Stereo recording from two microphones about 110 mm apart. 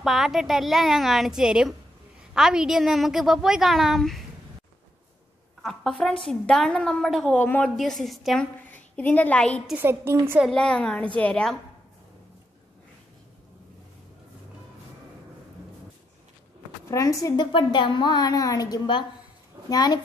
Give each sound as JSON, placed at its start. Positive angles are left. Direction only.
{"t": 0.0, "sound": "a woman's voice", "side_deg": -5}
{"t": 5.6, "sound": "a woman's voice", "side_deg": 5}
{"t": 7.3, "sound": "a woman's voice", "side_deg": 15}
{"t": 7.6, "sound": "a woman's voice", "side_deg": 0}
{"t": 8.6, "sound": "a woman's voice", "side_deg": 15}
{"t": 9.8, "sound": "a woman's voice", "side_deg": -20}
{"t": 10.5, "sound": "a woman's voice", "side_deg": 5}
{"t": 16.9, "sound": "a woman's voice", "side_deg": 30}
{"t": 17.4, "sound": "a woman's voice", "side_deg": 50}